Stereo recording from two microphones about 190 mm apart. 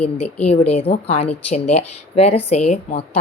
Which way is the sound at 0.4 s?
30° left (ahead or behind).